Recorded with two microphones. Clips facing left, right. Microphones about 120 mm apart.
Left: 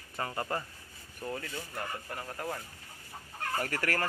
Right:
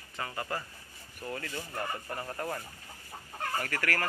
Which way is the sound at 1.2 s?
15° left (ahead or behind).